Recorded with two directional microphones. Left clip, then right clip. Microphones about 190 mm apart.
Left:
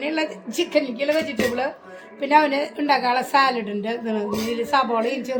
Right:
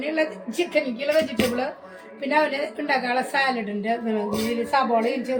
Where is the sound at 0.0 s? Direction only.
55° left (ahead or behind).